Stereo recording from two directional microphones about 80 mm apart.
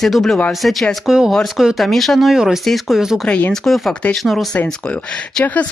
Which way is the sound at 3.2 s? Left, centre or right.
Centre.